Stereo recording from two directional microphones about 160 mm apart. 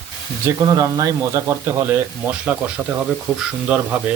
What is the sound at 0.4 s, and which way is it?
Speech, 20° right (ahead or behind).